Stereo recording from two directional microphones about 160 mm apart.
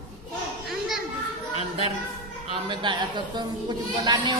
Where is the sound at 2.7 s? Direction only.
30° right (ahead or behind).